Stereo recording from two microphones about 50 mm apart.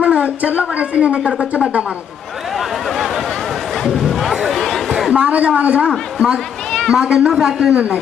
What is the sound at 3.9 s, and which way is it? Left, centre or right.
Music, centre.